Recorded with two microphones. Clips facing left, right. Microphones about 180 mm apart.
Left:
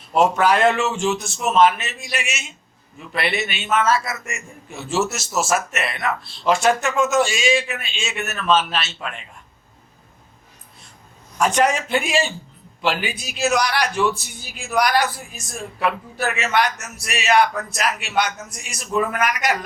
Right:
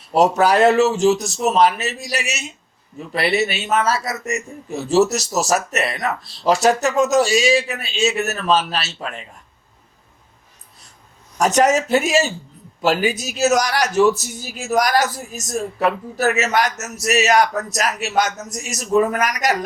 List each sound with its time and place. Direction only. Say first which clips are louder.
0.1 s a man's voice: right 2 dB; 40° right (ahead or behind)
11.3 s a man's voice: right 3 dB; 40° right (ahead or behind)